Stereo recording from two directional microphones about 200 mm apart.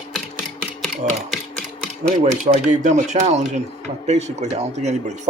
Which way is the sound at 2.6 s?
40° right (ahead or behind).